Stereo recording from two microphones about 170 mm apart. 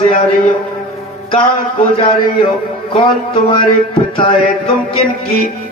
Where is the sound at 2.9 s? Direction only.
30° left (ahead or behind).